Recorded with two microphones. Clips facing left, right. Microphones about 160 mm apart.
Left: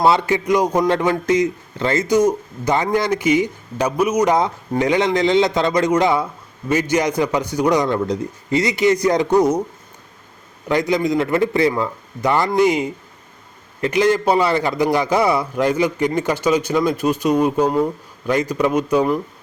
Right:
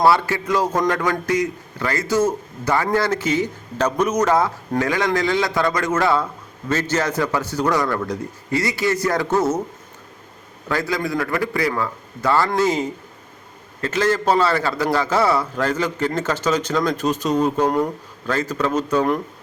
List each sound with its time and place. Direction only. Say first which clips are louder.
0.0 s a man's voice: left 1 dB; 20° left (ahead or behind)
10.7 s a man's voice: left 5 dB; 20° left (ahead or behind)